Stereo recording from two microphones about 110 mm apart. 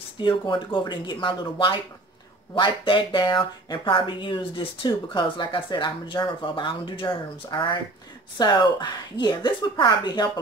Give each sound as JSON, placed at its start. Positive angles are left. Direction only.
{"t": 0.2, "sound": "a woman's voice", "side_deg": 50}